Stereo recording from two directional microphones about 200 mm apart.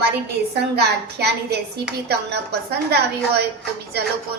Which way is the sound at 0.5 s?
55° right (ahead or behind).